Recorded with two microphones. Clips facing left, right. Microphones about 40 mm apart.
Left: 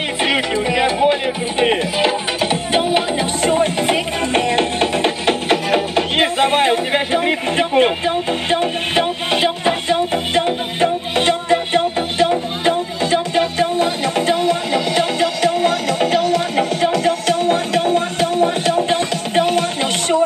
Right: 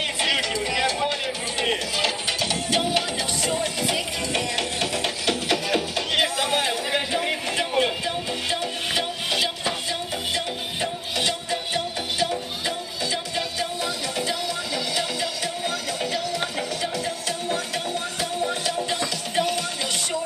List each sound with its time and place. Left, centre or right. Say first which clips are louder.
0.2 s music: left 7 dB; left